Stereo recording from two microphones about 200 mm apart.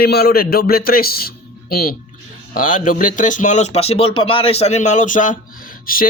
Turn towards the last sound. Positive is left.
turn(degrees=45)  # may be behind; listen again after turning